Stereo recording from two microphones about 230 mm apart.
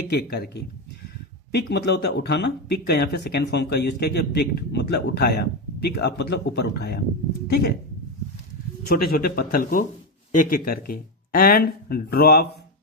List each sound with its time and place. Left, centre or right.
0.1 s speech: left
8.9 s speech: left